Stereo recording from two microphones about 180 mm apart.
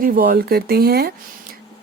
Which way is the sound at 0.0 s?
55° right (ahead or behind).